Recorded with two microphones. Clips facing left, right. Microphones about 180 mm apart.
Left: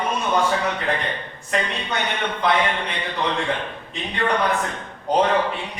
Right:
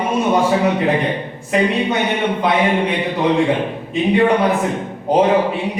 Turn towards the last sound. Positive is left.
turn(degrees=-15)  # may be behind; listen again after turning